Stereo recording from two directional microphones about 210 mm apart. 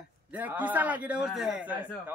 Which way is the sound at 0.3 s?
5° right (ahead or behind).